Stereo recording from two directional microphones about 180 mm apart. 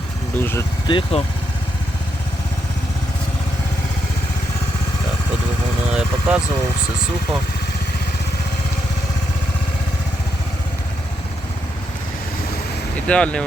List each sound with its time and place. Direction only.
0.3 s speech: 10° left (ahead or behind)
0.9 s speech: 30° left (ahead or behind)
5.9 s vehicle: 5° right (ahead or behind)
13.1 s speech: 5° left (ahead or behind)